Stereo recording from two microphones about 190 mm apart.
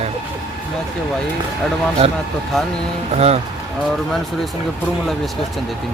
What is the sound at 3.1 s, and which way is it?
Speech, 35° right (ahead or behind).